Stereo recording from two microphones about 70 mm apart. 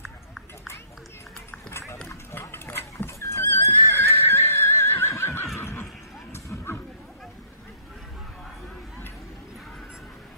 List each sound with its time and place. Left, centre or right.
1.7 s run: left
2.0 s horse: left
5.6 s neigh: left
6.3 s dog: left